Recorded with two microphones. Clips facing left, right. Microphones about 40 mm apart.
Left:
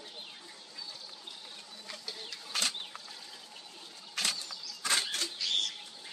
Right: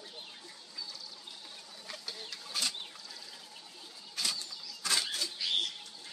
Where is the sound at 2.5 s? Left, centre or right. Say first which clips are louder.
Left 2 dB; left.